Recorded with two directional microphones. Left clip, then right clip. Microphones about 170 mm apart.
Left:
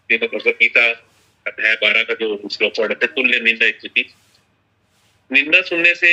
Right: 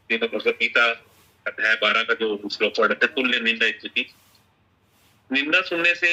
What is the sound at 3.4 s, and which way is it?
Speech, 25° right (ahead or behind).